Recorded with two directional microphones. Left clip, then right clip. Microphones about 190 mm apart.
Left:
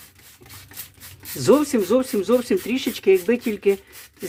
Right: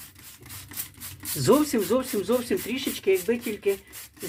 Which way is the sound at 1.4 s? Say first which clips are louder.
Left 4 dB; 25° left (ahead or behind).